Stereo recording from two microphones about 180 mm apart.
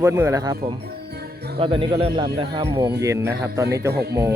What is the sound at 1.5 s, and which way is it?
Speech, 30° right (ahead or behind).